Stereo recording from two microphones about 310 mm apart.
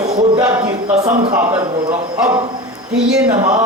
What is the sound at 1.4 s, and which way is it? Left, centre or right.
Speech, centre.